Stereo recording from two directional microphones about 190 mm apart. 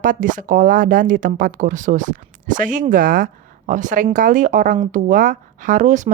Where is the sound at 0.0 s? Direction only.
45° right (ahead or behind).